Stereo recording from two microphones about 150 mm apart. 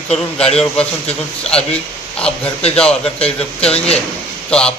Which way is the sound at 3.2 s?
40° left (ahead or behind).